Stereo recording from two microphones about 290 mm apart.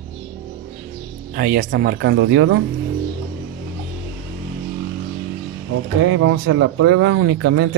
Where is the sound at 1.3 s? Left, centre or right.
Right.